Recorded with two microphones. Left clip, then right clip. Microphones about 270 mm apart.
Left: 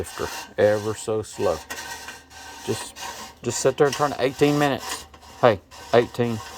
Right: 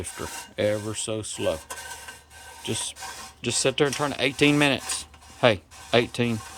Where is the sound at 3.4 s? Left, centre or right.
Centre.